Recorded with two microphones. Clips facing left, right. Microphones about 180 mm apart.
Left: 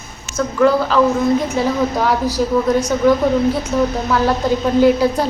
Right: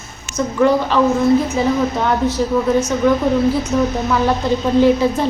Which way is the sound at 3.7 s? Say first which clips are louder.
Left 1 dB; centre (ahead or behind).